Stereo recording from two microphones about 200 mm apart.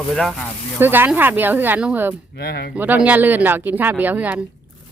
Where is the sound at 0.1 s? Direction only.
5° left (ahead or behind).